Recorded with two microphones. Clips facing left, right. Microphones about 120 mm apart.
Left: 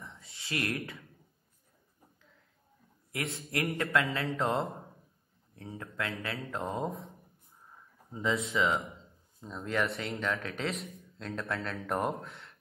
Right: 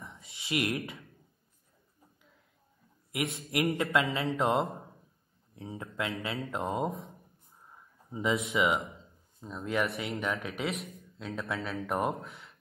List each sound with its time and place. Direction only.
0.0 s a sound: 25° right (ahead or behind)
3.1 s speech: 20° right (ahead or behind)
5.6 s speech: 15° right (ahead or behind)
8.1 s speech: 20° right (ahead or behind)
9.4 s speech: centre (ahead or behind)